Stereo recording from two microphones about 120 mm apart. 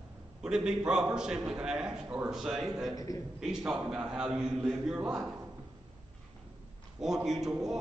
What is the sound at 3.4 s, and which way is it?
A man's voice, 5° right (ahead or behind).